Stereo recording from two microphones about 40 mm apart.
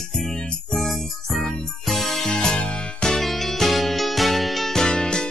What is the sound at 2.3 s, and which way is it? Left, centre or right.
Music, centre.